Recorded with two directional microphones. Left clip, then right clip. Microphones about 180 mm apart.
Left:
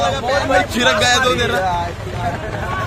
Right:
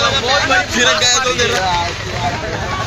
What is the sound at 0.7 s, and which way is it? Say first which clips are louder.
Speech: right 1 dB; 60° left (ahead or behind).